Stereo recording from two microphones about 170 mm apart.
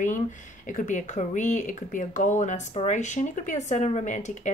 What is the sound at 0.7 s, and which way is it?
Speech, 50° left (ahead or behind).